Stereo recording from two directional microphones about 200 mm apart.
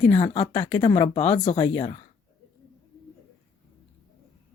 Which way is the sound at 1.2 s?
30° left (ahead or behind).